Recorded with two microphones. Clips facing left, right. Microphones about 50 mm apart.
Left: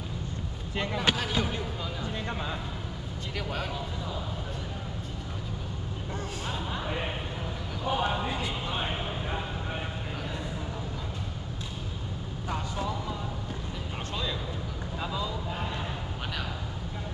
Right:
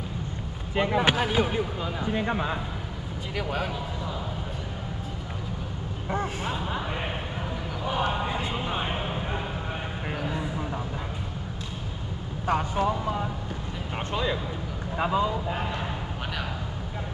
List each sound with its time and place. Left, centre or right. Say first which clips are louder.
0.7 s speech: right 6 dB; centre
3.3 s a man's voice: right 5 dB; centre
6.0 s speech: right 8 dB; right
8.4 s speech: right 3 dB; right
12.4 s speech: right 8 dB; right